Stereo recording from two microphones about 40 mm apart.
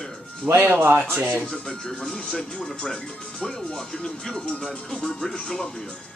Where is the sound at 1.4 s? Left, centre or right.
Centre.